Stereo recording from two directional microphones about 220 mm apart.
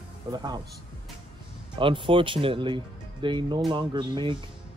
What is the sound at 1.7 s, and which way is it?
Speech, 25° right (ahead or behind).